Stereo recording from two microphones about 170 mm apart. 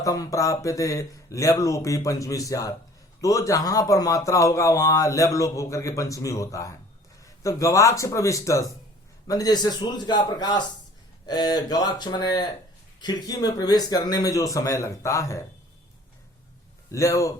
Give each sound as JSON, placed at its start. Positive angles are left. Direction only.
{"t": 0.0, "sound": "speech", "side_deg": 20}
{"t": 16.9, "sound": "speech", "side_deg": 20}